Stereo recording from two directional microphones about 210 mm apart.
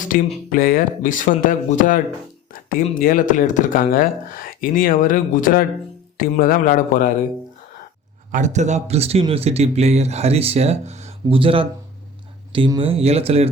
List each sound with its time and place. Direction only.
0.1 s speech: 40° left (ahead or behind)
8.3 s speech: 35° right (ahead or behind)